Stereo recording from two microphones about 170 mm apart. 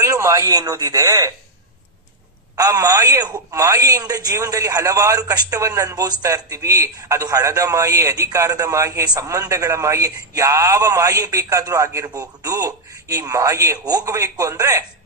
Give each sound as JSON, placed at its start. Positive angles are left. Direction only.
{"t": 0.0, "sound": "a man's voice", "side_deg": -20}
{"t": 2.6, "sound": "a man's voice", "side_deg": -20}